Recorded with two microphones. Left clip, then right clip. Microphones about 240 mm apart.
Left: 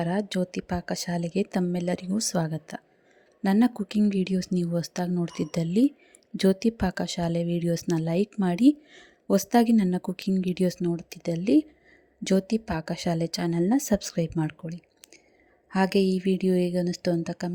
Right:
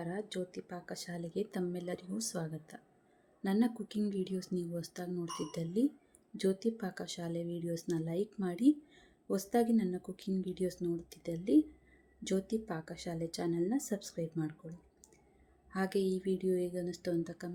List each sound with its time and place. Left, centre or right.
0.0 s speech: left